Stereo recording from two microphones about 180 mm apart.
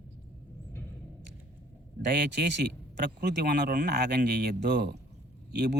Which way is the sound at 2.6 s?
70° right (ahead or behind).